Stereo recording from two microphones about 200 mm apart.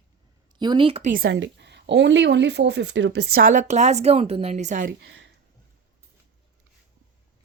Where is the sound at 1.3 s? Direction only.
65° right (ahead or behind); by 4.9 s 40° right (ahead or behind).